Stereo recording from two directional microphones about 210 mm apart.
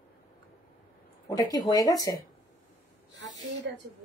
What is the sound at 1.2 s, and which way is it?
Speech, 15° left (ahead or behind).